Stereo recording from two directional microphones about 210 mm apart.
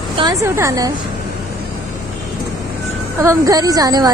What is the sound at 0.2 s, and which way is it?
Speech, 15° right (ahead or behind).